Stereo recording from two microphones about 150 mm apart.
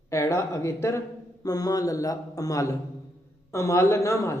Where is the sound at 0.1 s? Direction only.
20° left (ahead or behind).